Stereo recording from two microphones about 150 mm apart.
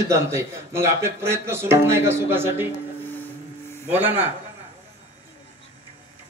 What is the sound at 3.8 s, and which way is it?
Speech, 15° right (ahead or behind).